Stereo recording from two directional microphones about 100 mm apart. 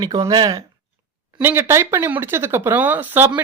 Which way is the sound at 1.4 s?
25° right (ahead or behind).